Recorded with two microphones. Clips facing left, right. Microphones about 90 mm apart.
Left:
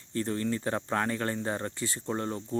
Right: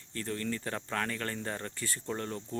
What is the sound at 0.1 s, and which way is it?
Speech, 25° left (ahead or behind).